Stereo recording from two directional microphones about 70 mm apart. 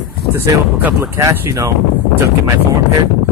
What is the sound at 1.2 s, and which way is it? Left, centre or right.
Speech, right.